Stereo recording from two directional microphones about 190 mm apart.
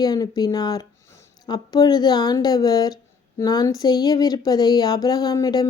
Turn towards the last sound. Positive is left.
turn(degrees=20)  # may be behind; listen again after turning